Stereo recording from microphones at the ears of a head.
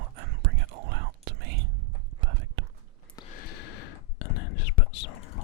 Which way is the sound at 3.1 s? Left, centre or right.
Left.